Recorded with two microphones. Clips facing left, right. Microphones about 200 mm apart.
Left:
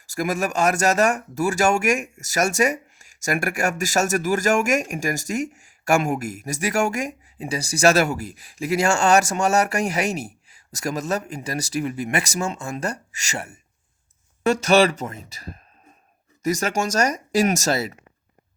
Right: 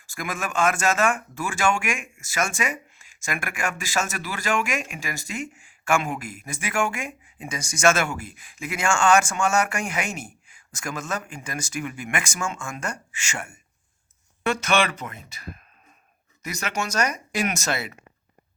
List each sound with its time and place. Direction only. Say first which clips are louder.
0.1 s speech: left 7 dB; 40° left (ahead or behind)